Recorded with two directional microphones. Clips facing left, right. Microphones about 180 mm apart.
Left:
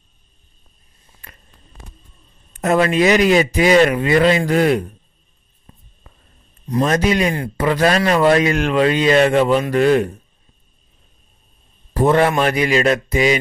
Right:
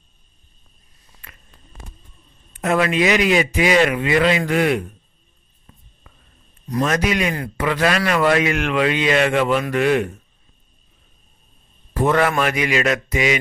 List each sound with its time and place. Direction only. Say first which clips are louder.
2.5 s a man's voice: left 3 dB; 40° left (ahead or behind)
5.7 s a sound: left 2 dB; 30° left (ahead or behind)
6.7 s a man's voice: left 3 dB; 30° left (ahead or behind)
11.9 s a man's voice: left 3 dB; 30° left (ahead or behind)